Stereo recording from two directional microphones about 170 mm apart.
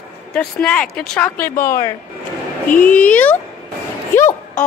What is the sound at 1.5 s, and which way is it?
Speech, 55° left (ahead or behind).